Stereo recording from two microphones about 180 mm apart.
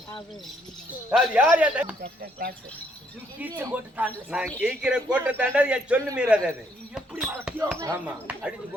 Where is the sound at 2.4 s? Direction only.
50° right (ahead or behind).